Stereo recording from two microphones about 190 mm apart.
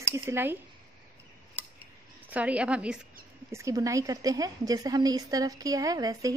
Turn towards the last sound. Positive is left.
turn(degrees=-20)  # may be behind; listen again after turning